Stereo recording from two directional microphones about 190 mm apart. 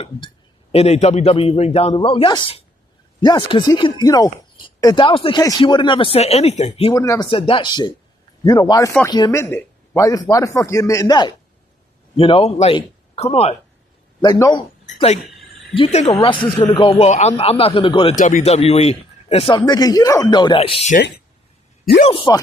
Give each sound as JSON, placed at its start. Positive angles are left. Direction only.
{"t": 0.7, "sound": "a man's voice", "side_deg": 35}
{"t": 6.9, "sound": "speech", "side_deg": 15}
{"t": 7.3, "sound": "speech", "side_deg": 30}
{"t": 14.2, "sound": "speech", "side_deg": 20}
{"t": 14.9, "sound": "a man's voice", "side_deg": 35}
{"t": 18.2, "sound": "speech", "side_deg": 40}
{"t": 22.0, "sound": "speech", "side_deg": 25}